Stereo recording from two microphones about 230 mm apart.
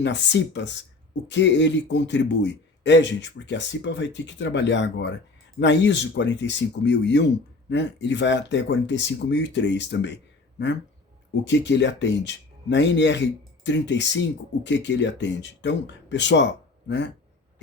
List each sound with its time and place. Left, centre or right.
0.0 s a man's voice: left
11.4 s a man's voice: left